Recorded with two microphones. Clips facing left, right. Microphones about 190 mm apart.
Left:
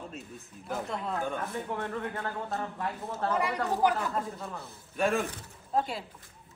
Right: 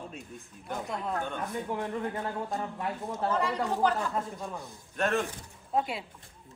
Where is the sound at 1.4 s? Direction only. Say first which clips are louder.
Right 1 dB; 15° right (ahead or behind).